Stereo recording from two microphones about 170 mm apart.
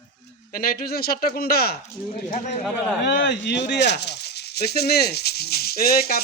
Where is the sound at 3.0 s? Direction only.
85° left.